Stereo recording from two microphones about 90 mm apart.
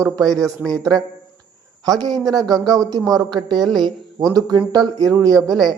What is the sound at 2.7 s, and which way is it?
Speech, 40° right (ahead or behind).